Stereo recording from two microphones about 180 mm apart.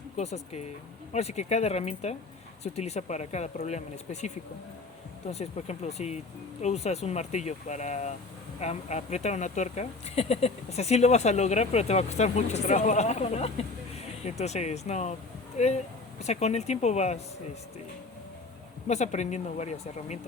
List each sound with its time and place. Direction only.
0.2 s speech: 40° left (ahead or behind)
5.3 s speech: 35° left (ahead or behind)
18.9 s speech: 40° left (ahead or behind)